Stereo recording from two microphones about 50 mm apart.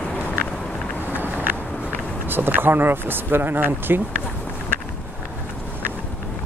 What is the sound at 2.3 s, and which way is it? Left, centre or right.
Speech, right.